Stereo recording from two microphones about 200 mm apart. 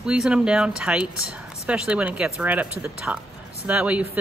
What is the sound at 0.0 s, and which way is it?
Speech, 5° right (ahead or behind).